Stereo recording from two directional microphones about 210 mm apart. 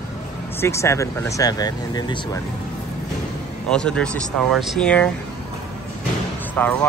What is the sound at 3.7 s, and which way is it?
Speech, 5° left (ahead or behind).